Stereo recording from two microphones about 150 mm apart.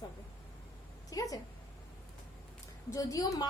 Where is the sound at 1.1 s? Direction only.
25° left (ahead or behind).